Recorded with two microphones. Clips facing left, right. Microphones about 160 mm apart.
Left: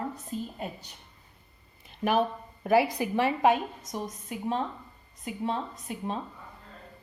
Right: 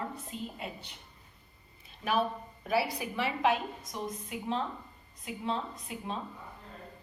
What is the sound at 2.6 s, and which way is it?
A woman's voice, 55° left (ahead or behind).